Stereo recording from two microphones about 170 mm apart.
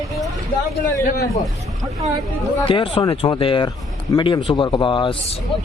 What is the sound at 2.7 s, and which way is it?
Speech, 30° left (ahead or behind).